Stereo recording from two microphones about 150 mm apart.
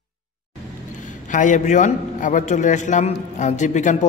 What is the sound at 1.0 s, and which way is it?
A man's voice, 60° left (ahead or behind).